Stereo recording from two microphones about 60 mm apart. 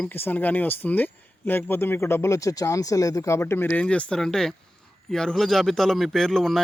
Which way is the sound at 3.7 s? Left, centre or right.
Left.